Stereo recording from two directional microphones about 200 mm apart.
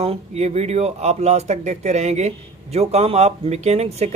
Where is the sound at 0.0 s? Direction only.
30° right (ahead or behind).